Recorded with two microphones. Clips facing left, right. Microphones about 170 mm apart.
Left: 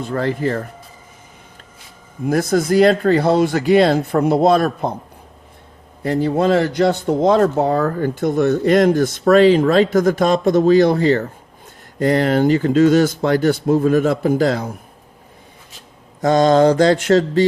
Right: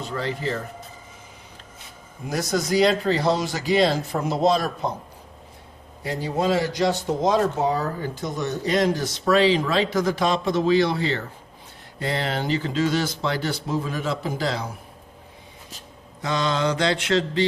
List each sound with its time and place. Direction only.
0.0 s speech: 50° left (ahead or behind)
2.2 s speech: 55° left (ahead or behind)
6.0 s speech: 55° left (ahead or behind)
16.2 s speech: 45° left (ahead or behind)